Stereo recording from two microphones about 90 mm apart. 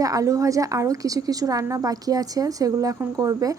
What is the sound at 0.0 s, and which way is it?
A woman's voice, 40° right (ahead or behind).